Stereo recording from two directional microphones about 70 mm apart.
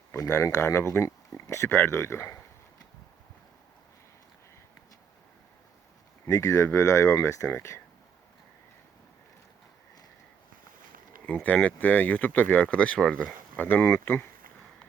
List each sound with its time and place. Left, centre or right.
0.3 s speech: left
6.2 s speech: left
11.4 s speech: left
13.6 s speech: left